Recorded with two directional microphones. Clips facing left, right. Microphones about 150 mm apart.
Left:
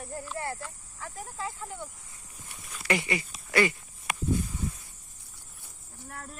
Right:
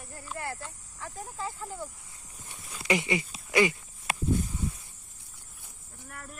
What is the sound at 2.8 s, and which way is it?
Speech, 20° right (ahead or behind).